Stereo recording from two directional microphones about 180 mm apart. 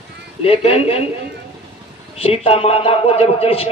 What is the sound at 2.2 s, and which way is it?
A man's voice, 30° left (ahead or behind).